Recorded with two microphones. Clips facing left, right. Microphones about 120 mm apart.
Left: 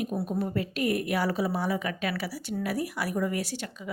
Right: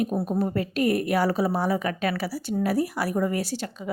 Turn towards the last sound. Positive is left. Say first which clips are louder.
# right 4 dB
turn(degrees=-35)  # may be behind; listen again after turning